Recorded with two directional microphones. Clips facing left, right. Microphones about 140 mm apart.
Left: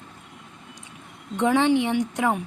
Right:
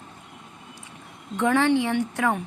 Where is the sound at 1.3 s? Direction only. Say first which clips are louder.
Left 1 dB; 20° left (ahead or behind).